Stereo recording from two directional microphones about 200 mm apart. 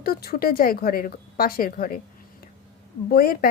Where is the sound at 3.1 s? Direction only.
50° left (ahead or behind).